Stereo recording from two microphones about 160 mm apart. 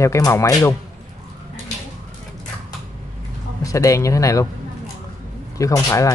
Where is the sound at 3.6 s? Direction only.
20° left (ahead or behind).